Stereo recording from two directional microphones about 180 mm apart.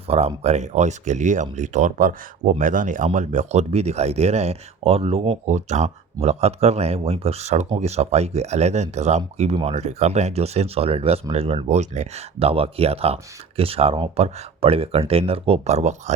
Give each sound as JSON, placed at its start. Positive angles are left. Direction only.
{"t": 0.1, "sound": "speech", "side_deg": -35}